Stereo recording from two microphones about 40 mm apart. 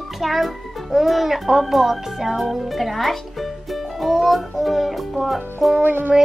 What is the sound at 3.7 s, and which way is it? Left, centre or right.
Music, centre.